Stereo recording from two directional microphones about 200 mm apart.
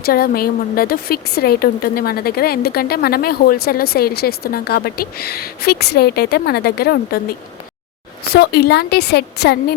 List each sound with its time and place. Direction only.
0.0 s speech: 50° left (ahead or behind)
8.3 s a woman's voice: 50° left (ahead or behind)